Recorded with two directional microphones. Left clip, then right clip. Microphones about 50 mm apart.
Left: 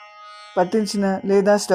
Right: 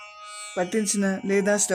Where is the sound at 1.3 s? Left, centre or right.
Centre.